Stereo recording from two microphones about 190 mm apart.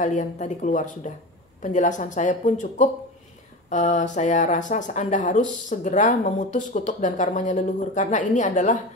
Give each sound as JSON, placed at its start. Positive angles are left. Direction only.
{"t": 0.0, "sound": "speech", "side_deg": 40}